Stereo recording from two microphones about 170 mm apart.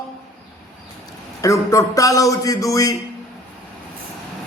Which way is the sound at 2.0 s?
20° left (ahead or behind).